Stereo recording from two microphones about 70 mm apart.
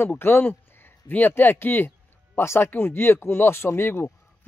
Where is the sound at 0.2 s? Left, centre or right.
Left.